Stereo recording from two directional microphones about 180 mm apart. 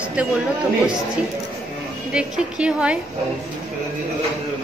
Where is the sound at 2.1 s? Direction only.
5° right (ahead or behind).